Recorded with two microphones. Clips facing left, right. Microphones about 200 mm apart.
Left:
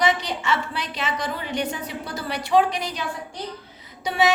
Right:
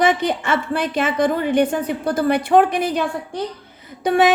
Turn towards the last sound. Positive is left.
turn(degrees=-55)  # may be behind; listen again after turning